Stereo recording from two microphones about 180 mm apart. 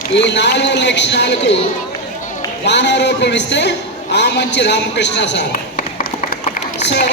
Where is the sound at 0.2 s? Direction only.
75° left (ahead or behind).